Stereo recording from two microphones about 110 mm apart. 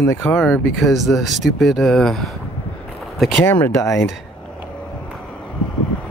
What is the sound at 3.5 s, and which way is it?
Speech, 20° left (ahead or behind).